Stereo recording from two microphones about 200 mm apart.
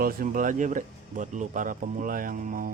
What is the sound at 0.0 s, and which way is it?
Speech, 45° right (ahead or behind).